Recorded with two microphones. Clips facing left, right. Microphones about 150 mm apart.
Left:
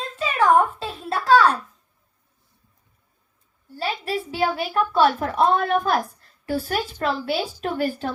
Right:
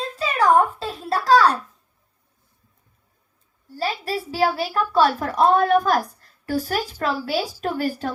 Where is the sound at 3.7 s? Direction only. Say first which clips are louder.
Right 1 dB; 40° right (ahead or behind).